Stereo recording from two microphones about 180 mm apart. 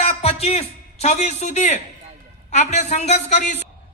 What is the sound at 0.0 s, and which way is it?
A man's voice, 35° left (ahead or behind).